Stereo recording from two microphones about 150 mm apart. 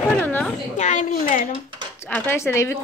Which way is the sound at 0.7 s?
55° left (ahead or behind).